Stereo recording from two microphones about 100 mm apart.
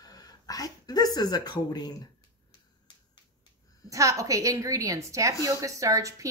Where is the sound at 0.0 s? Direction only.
40° left (ahead or behind).